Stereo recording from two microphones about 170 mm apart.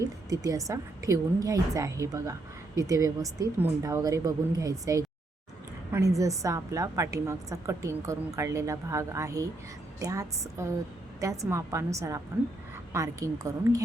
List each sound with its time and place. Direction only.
0.0 s a woman's voice: 20° right (ahead or behind)